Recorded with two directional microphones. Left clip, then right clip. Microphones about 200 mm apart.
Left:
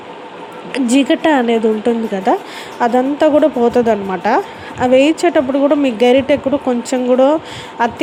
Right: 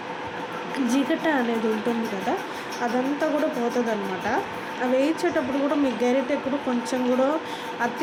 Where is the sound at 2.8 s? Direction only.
45° left (ahead or behind).